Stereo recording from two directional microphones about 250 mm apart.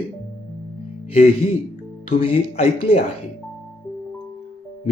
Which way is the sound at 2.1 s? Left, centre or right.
Left.